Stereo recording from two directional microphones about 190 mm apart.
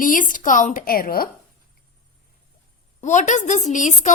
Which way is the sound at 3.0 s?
40° left (ahead or behind).